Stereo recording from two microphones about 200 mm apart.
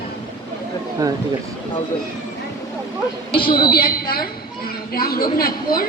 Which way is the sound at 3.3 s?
25° left (ahead or behind).